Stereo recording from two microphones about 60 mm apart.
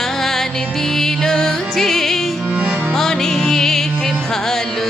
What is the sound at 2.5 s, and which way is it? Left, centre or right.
Music, right.